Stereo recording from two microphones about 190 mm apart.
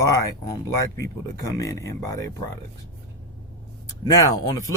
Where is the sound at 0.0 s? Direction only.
15° left (ahead or behind).